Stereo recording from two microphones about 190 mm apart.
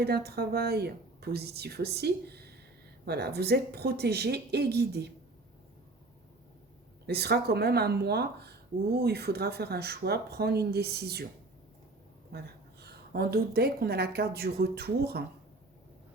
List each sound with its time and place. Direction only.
0.0 s speech: 55° right (ahead or behind)
7.1 s speech: 60° right (ahead or behind)
12.8 s speech: 55° right (ahead or behind)